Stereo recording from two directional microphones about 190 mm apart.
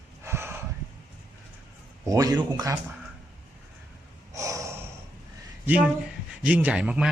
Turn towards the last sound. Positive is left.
turn(degrees=-5)  # may be behind; listen again after turning